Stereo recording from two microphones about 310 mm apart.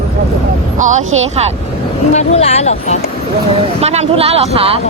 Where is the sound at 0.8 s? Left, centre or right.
Right.